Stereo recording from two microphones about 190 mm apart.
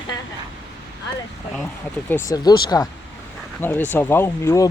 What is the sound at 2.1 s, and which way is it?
Speech, 15° left (ahead or behind).